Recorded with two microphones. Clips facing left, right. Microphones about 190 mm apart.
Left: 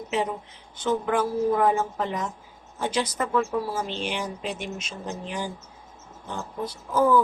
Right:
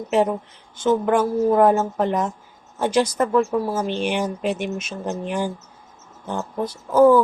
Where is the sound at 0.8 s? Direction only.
45° right (ahead or behind).